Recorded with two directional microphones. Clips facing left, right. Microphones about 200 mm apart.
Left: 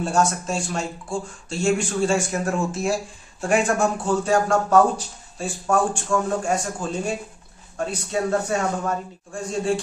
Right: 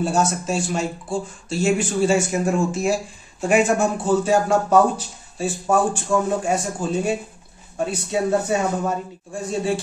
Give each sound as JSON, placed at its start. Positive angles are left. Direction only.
{"t": 0.0, "sound": "speech", "side_deg": -5}
{"t": 6.1, "sound": "speech", "side_deg": -20}
{"t": 6.4, "sound": "speech", "side_deg": -5}